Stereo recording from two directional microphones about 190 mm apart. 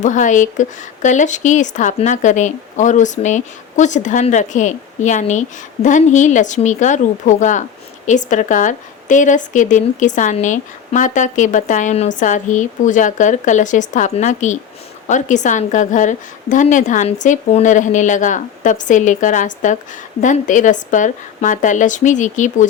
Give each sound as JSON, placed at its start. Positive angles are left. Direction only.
{"t": 0.0, "sound": "speech", "side_deg": 40}